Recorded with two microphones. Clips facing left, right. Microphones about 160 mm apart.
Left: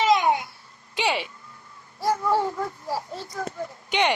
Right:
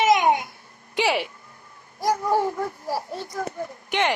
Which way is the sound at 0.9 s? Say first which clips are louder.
Right 3 dB; 5° right (ahead or behind).